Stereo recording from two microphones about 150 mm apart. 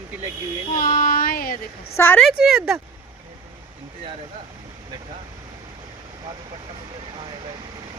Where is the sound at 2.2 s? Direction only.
Centre (ahead or behind).